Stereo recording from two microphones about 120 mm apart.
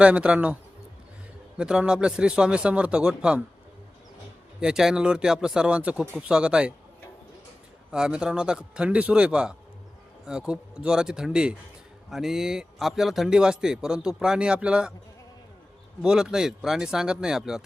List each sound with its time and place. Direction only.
0.0 s speech: 10° right (ahead or behind)
1.5 s speech: 5° right (ahead or behind)
4.6 s speech: 5° right (ahead or behind)
7.9 s speech: 5° right (ahead or behind)
16.0 s speech: 5° right (ahead or behind)